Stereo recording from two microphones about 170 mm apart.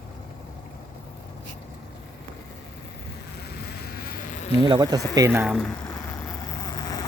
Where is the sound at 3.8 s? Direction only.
65° left (ahead or behind).